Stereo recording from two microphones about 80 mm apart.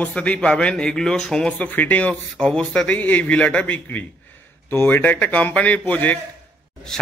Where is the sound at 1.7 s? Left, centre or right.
Left.